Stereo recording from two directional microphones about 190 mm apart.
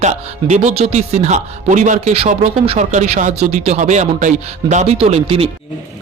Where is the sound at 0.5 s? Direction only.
35° right (ahead or behind).